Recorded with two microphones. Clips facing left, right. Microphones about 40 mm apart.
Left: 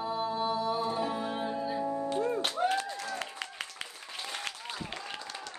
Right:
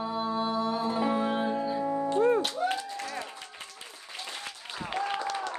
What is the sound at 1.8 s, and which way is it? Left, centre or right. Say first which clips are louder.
Music: right 3 dB; right.